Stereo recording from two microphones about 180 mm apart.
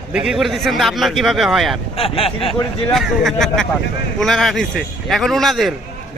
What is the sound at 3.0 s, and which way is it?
Speech, centre (ahead or behind).